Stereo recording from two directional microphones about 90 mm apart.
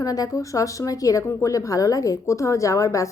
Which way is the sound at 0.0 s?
40° left (ahead or behind).